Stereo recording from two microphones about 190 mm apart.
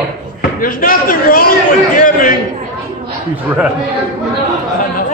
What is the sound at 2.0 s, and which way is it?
Chatter, 45° left (ahead or behind).